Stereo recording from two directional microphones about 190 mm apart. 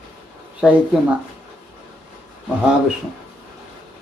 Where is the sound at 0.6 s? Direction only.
5° right (ahead or behind).